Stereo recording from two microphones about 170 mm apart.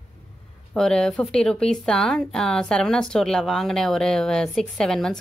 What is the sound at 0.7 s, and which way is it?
A woman's voice, 5° left (ahead or behind).